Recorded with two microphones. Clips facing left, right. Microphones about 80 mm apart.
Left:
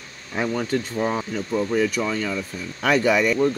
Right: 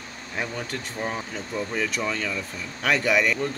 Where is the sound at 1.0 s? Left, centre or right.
Left.